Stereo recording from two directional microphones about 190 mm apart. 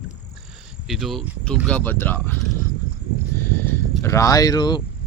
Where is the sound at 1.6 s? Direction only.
10° left (ahead or behind).